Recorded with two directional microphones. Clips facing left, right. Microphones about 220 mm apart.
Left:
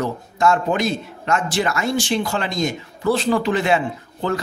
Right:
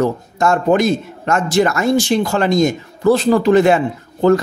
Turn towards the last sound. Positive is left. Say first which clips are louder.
# right 11 dB
turn(degrees=-45)  # may be behind; listen again after turning